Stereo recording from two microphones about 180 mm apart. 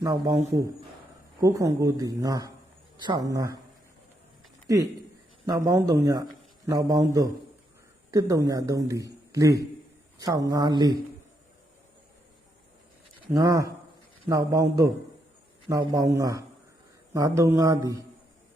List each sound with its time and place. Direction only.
0.0 s speech: 20° right (ahead or behind)
1.4 s speech: 20° right (ahead or behind)
4.6 s speech: 20° right (ahead or behind)
13.3 s speech: 20° right (ahead or behind)